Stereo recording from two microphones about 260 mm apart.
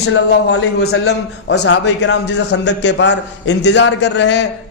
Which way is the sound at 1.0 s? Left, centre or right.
Left.